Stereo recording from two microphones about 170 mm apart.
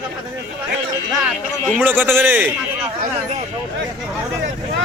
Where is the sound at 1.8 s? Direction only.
10° right (ahead or behind).